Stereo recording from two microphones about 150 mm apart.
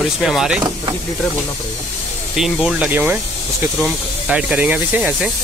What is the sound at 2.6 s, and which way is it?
Speech, 5° right (ahead or behind).